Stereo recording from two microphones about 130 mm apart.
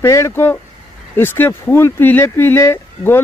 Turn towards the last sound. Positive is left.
turn(degrees=20)  # may be behind; listen again after turning